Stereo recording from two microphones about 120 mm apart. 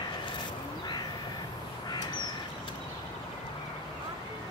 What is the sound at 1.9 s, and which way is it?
Crow, 35° left (ahead or behind).